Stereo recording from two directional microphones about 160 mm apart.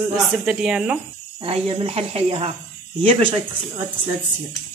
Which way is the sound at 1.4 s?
35° right (ahead or behind).